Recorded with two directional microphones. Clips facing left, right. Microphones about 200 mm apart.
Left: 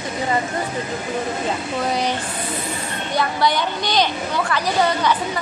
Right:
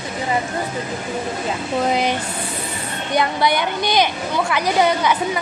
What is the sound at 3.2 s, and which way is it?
A woman's voice, 15° right (ahead or behind).